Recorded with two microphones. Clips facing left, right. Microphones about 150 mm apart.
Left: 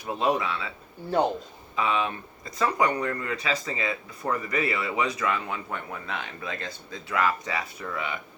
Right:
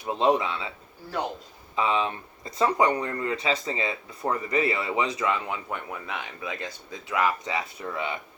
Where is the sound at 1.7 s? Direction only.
25° right (ahead or behind).